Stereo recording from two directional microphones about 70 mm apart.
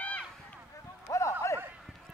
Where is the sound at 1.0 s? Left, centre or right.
Left.